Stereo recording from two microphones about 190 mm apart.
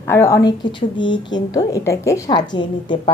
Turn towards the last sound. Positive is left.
turn(degrees=25)  # may be behind; listen again after turning